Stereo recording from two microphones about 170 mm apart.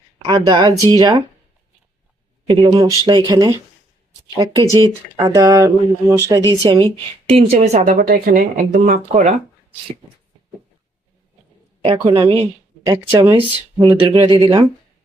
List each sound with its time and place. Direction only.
0.3 s speech: 25° right (ahead or behind)
2.5 s speech: 20° right (ahead or behind)
4.6 s speech: 20° left (ahead or behind)
5.1 s a woman's voice: 20° right (ahead or behind); by 9.3 s 50° right (ahead or behind)
11.9 s a woman's voice: 35° right (ahead or behind)
12.8 s speech: 15° right (ahead or behind)
13.8 s speech: 25° right (ahead or behind)